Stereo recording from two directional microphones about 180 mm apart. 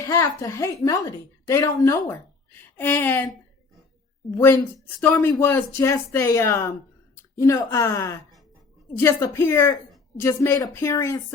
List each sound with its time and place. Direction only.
0.1 s a woman's voice: 15° left (ahead or behind)
4.4 s speech: 15° left (ahead or behind)